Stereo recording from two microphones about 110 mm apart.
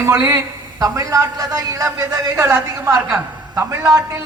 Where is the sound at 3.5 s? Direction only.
25° right (ahead or behind).